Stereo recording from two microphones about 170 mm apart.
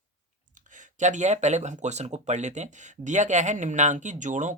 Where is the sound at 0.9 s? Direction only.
45° right (ahead or behind).